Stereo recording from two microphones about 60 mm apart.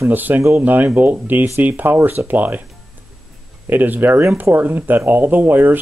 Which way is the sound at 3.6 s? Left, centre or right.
Right.